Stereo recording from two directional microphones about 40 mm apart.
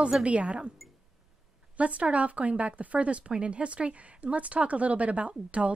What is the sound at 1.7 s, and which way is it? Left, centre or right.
Speech, right.